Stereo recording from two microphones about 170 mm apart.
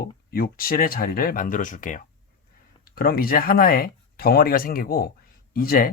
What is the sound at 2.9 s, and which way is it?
Speech, 60° left (ahead or behind).